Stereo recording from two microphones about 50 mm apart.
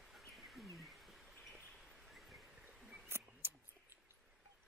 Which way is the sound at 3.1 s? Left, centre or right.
Right.